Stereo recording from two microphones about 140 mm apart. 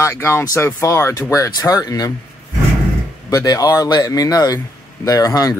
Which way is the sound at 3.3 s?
25° left (ahead or behind).